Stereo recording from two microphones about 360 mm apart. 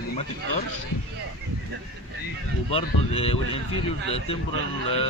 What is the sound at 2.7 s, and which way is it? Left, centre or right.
Speech, centre.